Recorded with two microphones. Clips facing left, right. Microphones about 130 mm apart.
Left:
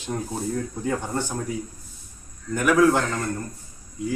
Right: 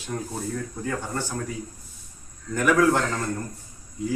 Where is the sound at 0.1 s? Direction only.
30° left (ahead or behind).